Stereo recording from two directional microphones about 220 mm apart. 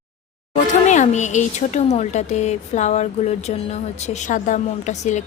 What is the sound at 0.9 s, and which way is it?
A woman's voice, 30° left (ahead or behind).